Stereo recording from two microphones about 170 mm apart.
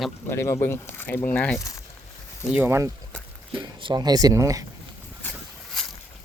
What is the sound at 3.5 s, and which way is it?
Speech, 30° right (ahead or behind).